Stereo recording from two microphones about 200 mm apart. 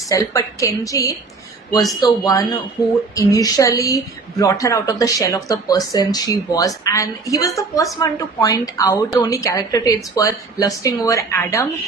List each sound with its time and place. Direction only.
0.1 s a woman's voice: 15° left (ahead or behind)